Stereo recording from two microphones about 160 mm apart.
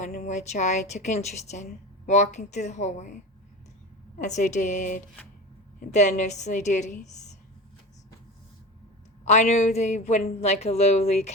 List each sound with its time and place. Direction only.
0.3 s speech: 45° left (ahead or behind)
4.2 s speech: 50° left (ahead or behind)
9.2 s speech: 45° left (ahead or behind)